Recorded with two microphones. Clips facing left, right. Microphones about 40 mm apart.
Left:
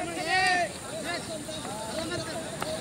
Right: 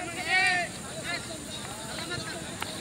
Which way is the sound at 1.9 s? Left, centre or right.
Right.